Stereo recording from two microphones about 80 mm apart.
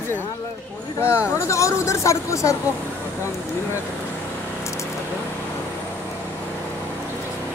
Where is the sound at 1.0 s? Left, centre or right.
Left.